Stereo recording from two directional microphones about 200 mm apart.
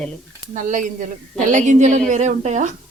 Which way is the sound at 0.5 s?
40° right (ahead or behind).